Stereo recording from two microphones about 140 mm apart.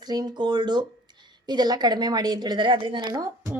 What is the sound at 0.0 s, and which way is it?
A woman's voice, 30° right (ahead or behind).